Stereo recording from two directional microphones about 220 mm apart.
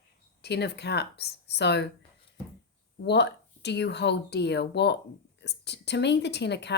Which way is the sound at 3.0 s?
50° left (ahead or behind).